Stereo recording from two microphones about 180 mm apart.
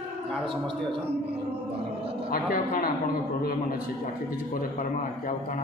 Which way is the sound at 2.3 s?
55° left (ahead or behind).